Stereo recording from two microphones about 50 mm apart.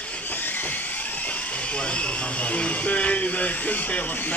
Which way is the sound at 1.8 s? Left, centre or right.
Left.